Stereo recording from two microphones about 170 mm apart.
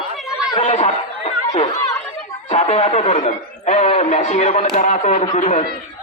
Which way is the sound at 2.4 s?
40° left (ahead or behind).